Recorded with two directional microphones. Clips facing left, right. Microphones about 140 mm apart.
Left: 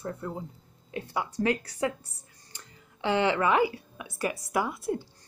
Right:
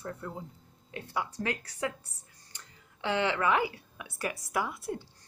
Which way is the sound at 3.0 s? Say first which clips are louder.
Left 4 dB; 15° left (ahead or behind).